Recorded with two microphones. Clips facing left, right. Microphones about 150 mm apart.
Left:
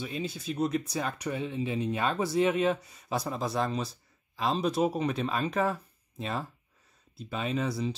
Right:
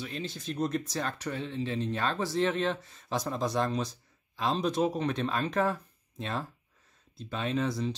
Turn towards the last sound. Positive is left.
turn(degrees=5)  # may be behind; listen again after turning